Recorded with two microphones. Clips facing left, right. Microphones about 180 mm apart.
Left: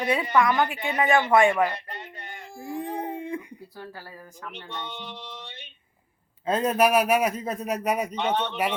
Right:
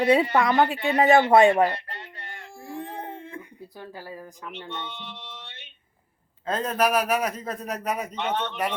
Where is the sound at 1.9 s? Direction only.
20° left (ahead or behind).